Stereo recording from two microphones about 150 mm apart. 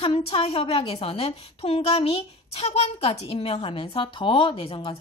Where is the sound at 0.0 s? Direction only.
40° left (ahead or behind).